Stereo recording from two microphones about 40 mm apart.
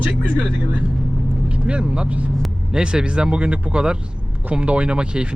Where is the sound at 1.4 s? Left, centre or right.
Right.